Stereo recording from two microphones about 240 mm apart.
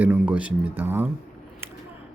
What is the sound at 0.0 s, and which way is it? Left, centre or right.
Speech, centre.